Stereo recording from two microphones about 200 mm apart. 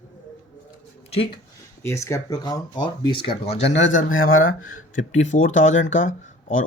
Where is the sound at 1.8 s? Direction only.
15° left (ahead or behind).